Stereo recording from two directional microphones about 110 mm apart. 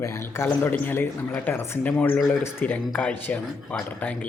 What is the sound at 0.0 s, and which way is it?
A man's voice, 25° left (ahead or behind).